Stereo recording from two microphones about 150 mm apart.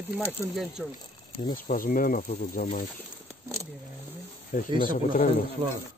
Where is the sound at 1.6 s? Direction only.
70° left (ahead or behind).